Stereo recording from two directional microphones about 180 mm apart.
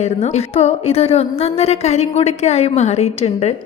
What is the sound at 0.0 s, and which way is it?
A woman's voice, 40° left (ahead or behind).